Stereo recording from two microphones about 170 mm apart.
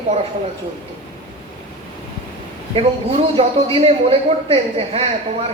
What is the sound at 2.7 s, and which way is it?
A man's voice, 35° right (ahead or behind).